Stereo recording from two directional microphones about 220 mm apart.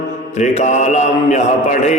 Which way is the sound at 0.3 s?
30° left (ahead or behind).